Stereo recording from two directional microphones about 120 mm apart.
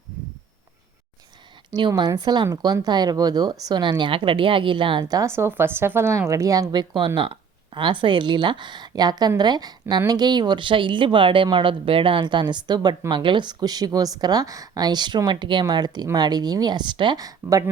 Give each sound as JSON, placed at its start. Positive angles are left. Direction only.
{"t": 2.0, "sound": "speech", "side_deg": -35}
{"t": 5.3, "sound": "speech", "side_deg": -20}